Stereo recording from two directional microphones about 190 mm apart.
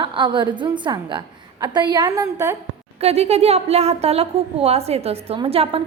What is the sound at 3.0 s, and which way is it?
A woman's voice, 35° right (ahead or behind).